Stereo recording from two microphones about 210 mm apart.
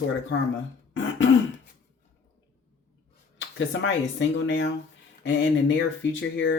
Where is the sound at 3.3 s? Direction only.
60° left (ahead or behind).